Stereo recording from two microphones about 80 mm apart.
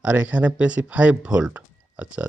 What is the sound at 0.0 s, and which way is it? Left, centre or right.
Speech, centre.